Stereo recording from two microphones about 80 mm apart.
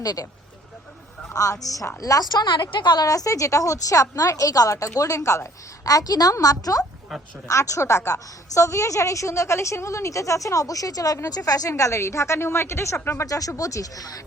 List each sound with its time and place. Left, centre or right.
0.0 s a woman's voice: left
1.3 s a woman's voice: left
7.1 s speech: centre
7.4 s a woman's voice: left
11.7 s a woman's voice: left